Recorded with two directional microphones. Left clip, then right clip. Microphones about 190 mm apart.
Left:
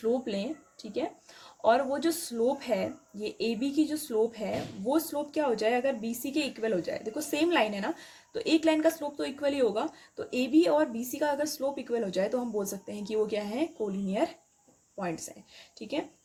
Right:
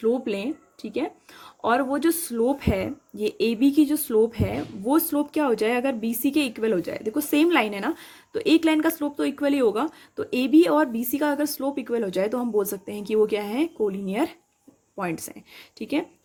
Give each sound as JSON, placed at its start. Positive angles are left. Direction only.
{"t": 0.0, "sound": "speech", "side_deg": -45}